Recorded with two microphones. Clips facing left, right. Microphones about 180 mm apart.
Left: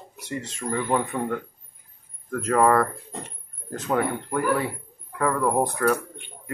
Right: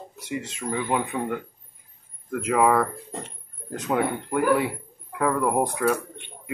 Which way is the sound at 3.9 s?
10° right (ahead or behind).